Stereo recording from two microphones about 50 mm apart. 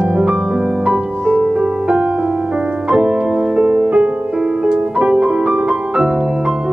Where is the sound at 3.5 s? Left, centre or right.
Centre.